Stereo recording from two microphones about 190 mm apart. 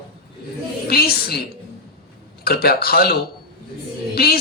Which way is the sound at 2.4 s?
55° left (ahead or behind).